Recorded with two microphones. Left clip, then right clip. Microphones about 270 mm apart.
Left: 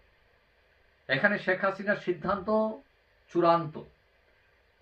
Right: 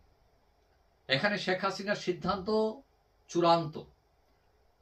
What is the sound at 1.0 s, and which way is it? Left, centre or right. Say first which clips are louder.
Speech: left 3 dB; centre.